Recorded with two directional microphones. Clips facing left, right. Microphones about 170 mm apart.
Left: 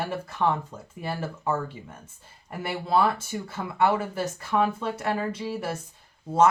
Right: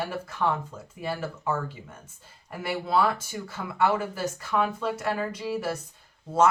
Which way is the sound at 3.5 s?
30° left (ahead or behind).